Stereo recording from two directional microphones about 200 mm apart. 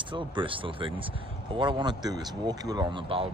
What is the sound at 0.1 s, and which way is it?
Speech, 25° right (ahead or behind).